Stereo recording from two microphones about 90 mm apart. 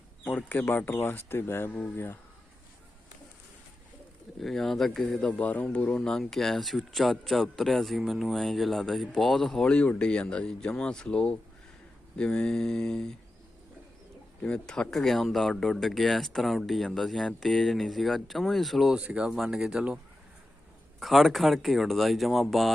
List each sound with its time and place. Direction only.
0.3 s speech: 20° left (ahead or behind)
4.4 s speech: centre (ahead or behind)
5.4 s speech: 15° left (ahead or behind)
14.4 s speech: 10° left (ahead or behind); by 20.0 s 10° right (ahead or behind)
21.0 s speech: centre (ahead or behind)